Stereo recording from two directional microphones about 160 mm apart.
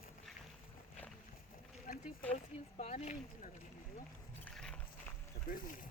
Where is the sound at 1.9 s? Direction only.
60° left (ahead or behind).